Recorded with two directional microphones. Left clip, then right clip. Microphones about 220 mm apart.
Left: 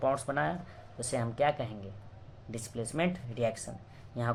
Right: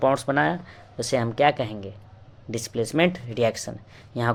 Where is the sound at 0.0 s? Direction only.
40° right (ahead or behind).